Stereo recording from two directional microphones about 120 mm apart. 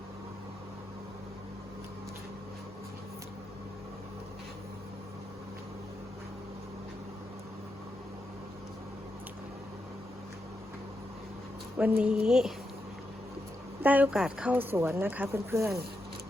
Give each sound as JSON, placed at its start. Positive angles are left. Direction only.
{"t": 11.8, "sound": "speech", "side_deg": -10}
{"t": 13.8, "sound": "speech", "side_deg": -15}